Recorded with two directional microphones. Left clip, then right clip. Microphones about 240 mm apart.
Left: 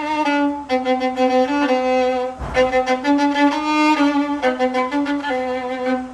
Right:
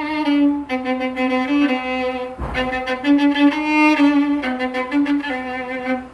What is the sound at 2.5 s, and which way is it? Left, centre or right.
Music, left.